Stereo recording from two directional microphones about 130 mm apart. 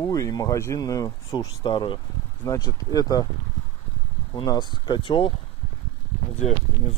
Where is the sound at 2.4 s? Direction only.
30° left (ahead or behind).